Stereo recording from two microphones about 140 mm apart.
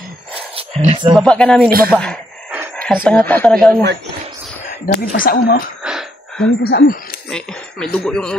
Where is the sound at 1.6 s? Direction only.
90° right.